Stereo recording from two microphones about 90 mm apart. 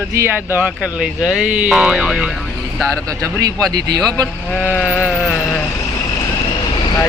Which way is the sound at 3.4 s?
45° right (ahead or behind).